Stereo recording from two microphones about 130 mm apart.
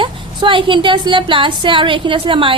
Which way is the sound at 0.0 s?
40° right (ahead or behind).